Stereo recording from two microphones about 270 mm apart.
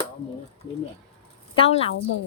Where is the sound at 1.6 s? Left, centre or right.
Left.